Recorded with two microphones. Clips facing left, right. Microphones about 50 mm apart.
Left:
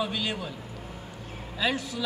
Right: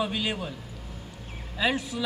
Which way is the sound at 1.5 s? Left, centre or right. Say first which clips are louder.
Right 2 dB; centre.